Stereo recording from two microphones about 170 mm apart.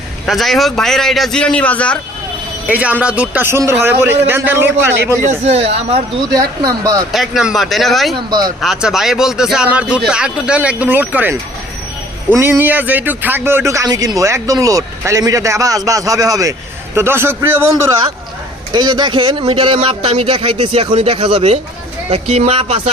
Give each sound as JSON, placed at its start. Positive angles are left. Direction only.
{"t": 0.3, "sound": "a man's voice", "side_deg": 0}
{"t": 2.6, "sound": "a man's voice", "side_deg": -10}
{"t": 6.3, "sound": "speech", "side_deg": -20}
{"t": 7.1, "sound": "a man's voice", "side_deg": 0}
{"t": 8.3, "sound": "speech", "side_deg": -25}
{"t": 8.6, "sound": "a man's voice", "side_deg": 0}
{"t": 18.7, "sound": "a man's voice", "side_deg": -25}